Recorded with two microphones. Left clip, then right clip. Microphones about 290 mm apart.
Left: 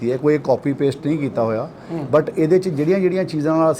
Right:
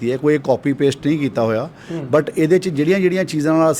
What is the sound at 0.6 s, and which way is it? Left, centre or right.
Speech, right.